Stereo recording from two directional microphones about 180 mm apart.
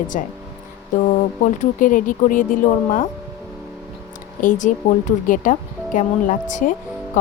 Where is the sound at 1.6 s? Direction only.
50° left (ahead or behind).